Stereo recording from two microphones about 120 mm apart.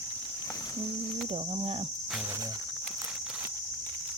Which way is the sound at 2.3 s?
25° right (ahead or behind).